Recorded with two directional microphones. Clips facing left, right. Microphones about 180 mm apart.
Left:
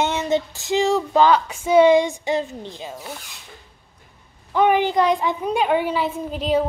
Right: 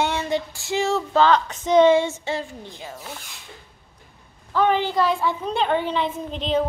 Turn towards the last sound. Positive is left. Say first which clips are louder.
# left 2 dB
turn(degrees=10)  # may be behind; listen again after turning